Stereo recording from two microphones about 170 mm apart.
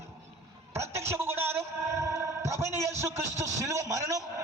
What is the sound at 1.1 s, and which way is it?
A man's voice, 15° right (ahead or behind).